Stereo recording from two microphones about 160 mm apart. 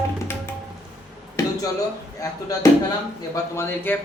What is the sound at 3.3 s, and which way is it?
Speech, 15° left (ahead or behind).